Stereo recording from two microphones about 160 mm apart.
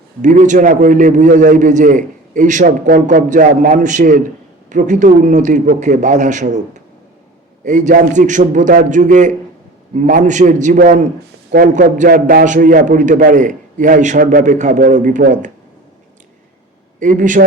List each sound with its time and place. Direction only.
0.2 s a man's voice: 50° right (ahead or behind)
17.0 s a man's voice: 55° right (ahead or behind)